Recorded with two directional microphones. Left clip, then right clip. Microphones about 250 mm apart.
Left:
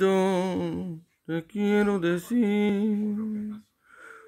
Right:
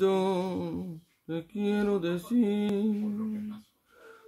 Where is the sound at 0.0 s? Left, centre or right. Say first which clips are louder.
Left 3 dB; left.